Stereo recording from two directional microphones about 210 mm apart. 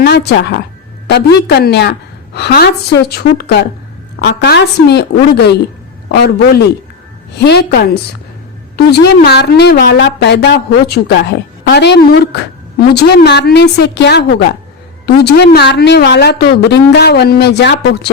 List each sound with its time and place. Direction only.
0.0 s a woman's voice: 50° left (ahead or behind)